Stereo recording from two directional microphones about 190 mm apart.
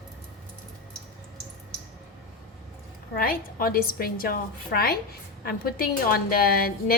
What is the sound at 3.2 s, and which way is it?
A woman's voice, 50° left (ahead or behind).